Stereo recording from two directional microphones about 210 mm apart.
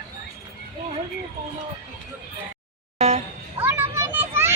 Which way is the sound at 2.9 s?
30° right (ahead or behind).